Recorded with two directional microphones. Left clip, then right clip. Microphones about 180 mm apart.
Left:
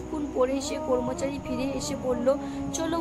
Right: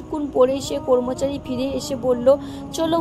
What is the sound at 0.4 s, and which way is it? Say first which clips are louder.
Speech: right 8 dB; 35° right (ahead or behind).